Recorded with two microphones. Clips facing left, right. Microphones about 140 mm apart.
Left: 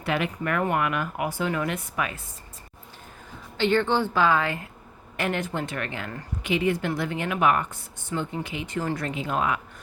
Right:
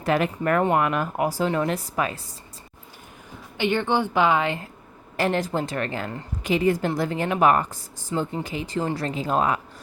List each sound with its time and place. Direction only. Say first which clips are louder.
0.0 s speech: right 5 dB; 40° right (ahead or behind)
3.6 s speech: even; 15° right (ahead or behind)
5.1 s speech: right 4 dB; 35° right (ahead or behind)